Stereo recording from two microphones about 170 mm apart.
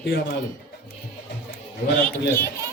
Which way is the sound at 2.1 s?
15° left (ahead or behind).